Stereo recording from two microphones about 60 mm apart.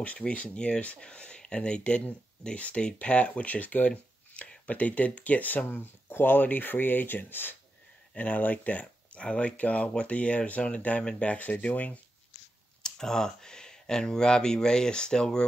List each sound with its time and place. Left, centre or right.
0.3 s speech: centre; by 7.5 s left
8.1 s speech: left
12.8 s speech: centre